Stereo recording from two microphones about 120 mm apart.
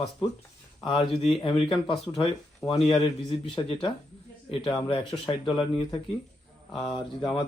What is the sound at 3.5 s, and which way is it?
Speech, 45° left (ahead or behind).